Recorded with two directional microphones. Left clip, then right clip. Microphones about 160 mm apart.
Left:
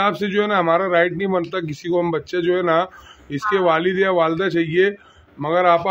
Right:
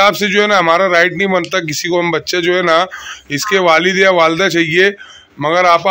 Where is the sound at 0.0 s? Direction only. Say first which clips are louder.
Right 8 dB; 15° right (ahead or behind).